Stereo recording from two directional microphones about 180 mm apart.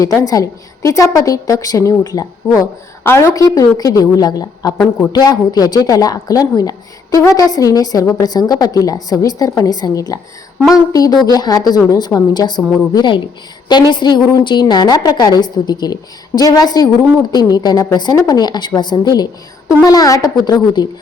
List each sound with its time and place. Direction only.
0.2 s a woman's voice: 20° left (ahead or behind)